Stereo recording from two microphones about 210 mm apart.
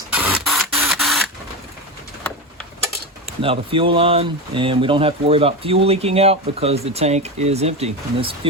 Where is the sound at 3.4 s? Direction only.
25° right (ahead or behind).